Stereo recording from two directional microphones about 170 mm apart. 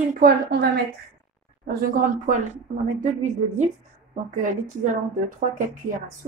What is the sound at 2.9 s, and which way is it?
Speech, 45° right (ahead or behind).